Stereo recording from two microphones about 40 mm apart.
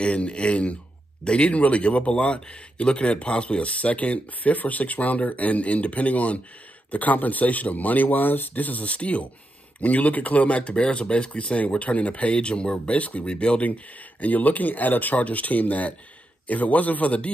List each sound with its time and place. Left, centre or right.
0.0 s speech: left
14.2 s speech: left